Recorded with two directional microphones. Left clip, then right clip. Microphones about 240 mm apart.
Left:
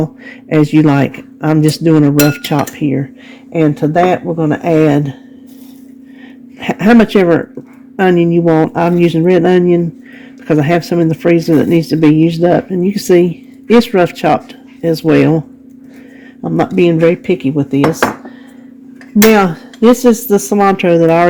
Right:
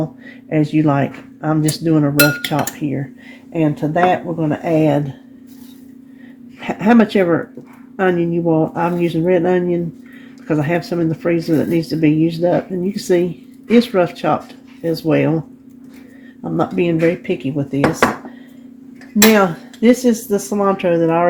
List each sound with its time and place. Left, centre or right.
0.0 s speech: left
6.6 s speech: left
20.3 s speech: left